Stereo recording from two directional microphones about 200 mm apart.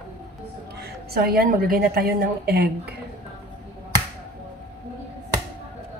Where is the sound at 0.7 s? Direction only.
50° right (ahead or behind).